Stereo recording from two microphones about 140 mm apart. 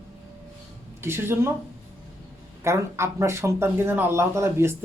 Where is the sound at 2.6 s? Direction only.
20° right (ahead or behind).